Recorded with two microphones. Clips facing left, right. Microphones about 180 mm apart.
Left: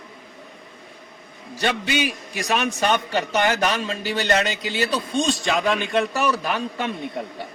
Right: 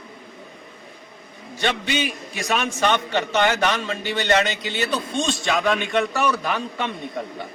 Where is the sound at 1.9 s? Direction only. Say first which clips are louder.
Left 1 dB; centre (ahead or behind).